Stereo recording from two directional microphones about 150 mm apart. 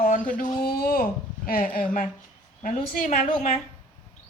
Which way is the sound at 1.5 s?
70° left (ahead or behind).